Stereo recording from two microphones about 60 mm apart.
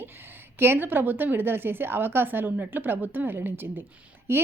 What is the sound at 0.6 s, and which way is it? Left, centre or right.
A woman's voice, right.